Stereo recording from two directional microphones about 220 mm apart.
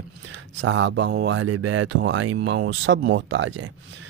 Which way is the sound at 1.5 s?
90° right.